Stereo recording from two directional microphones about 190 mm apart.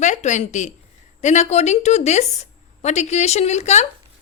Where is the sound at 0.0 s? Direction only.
40° left (ahead or behind).